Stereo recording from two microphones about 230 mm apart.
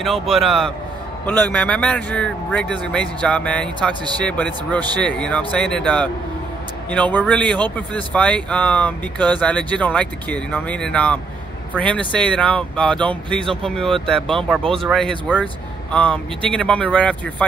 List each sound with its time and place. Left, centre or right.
0.0 s speech: centre